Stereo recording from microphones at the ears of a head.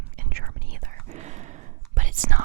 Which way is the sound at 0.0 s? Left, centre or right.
Right.